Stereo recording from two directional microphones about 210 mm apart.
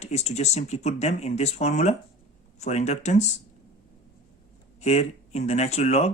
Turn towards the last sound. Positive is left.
turn(degrees=30)  # may be behind; listen again after turning